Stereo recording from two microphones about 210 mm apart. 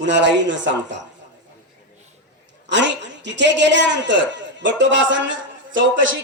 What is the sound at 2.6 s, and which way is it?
A man's voice, 60° right (ahead or behind).